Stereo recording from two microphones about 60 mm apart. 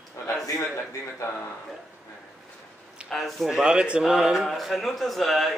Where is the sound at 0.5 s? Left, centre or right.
Left.